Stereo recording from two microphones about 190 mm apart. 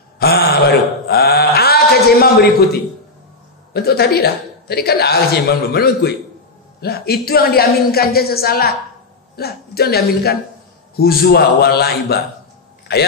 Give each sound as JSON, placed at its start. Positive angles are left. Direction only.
{"t": 0.2, "sound": "mantra", "side_deg": 55}
{"t": 3.7, "sound": "a man's voice", "side_deg": 55}